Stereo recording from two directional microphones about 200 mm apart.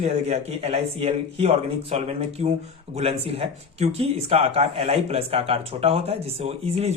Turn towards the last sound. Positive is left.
turn(degrees=-30)  # may be behind; listen again after turning